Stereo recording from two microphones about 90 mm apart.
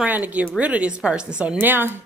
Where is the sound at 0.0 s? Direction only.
15° right (ahead or behind).